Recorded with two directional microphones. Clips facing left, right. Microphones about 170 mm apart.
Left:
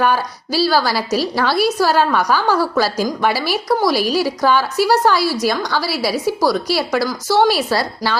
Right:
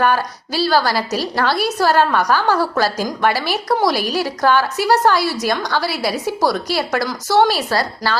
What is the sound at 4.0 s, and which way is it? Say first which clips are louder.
Speech: left 3 dB; 50° right (ahead or behind).